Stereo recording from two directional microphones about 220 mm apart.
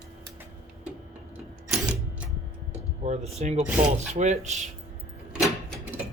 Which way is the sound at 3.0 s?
30° right (ahead or behind).